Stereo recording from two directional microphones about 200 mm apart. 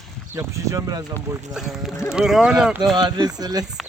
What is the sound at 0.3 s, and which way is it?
Speech, 15° right (ahead or behind).